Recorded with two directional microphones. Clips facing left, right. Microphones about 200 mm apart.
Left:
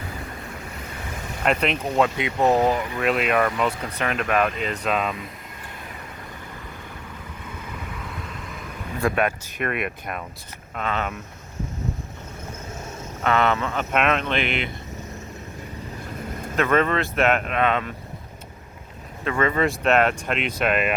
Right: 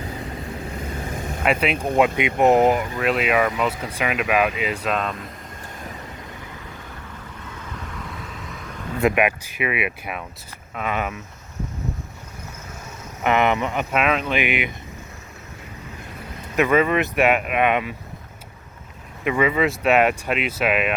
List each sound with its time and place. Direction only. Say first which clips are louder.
1.5 s speech: right 1 dB; 5° right (ahead or behind)
2.1 s speech: right 3 dB; 20° right (ahead or behind)
3.0 s speech: left 1 dB; centre (ahead or behind)
8.2 s vehicle: even; centre (ahead or behind)
9.0 s speech: right 3 dB; 15° right (ahead or behind)
13.2 s speech: right 2 dB; 15° right (ahead or behind)
13.9 s speech: even; 5° right (ahead or behind)
16.6 s speech: right 3 dB; 10° right (ahead or behind)
19.2 s speech: right 2 dB; 10° right (ahead or behind)